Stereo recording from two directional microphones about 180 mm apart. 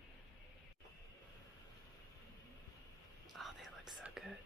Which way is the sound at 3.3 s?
Centre (ahead or behind).